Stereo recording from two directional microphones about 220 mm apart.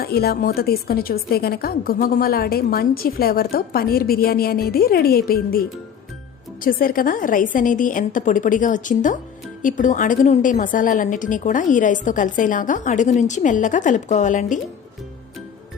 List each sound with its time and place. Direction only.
0.0 s a woman's voice: 45° left (ahead or behind)